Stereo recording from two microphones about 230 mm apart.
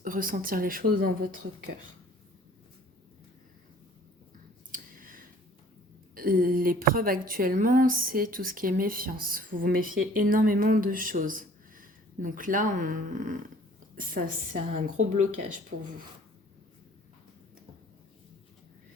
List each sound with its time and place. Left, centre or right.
0.0 s a woman's voice: right
4.7 s a sound: right
6.1 s a woman's voice: right